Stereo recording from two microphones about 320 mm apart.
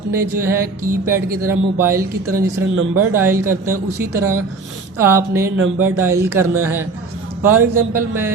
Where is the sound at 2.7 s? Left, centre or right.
Right.